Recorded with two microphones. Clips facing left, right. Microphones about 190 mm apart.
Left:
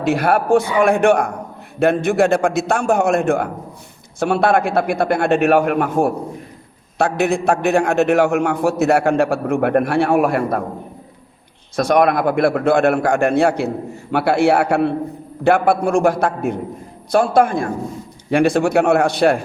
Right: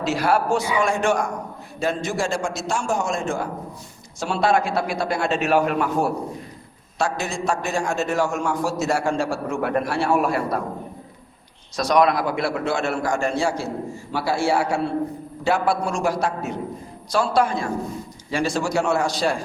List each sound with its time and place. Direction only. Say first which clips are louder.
0.0 s a man's voice: left 4 dB; 55° left (ahead or behind)
11.8 s a man's voice: left 4 dB; 55° left (ahead or behind)